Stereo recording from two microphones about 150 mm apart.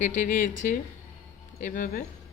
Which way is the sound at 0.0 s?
60° left (ahead or behind).